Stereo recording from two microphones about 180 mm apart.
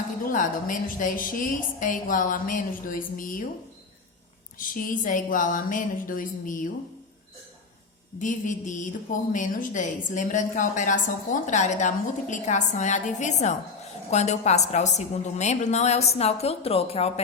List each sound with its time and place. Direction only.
0.3 s a woman's voice: 45° left (ahead or behind)
4.5 s a woman's voice: 50° left (ahead or behind)
8.2 s a woman's voice: 45° left (ahead or behind)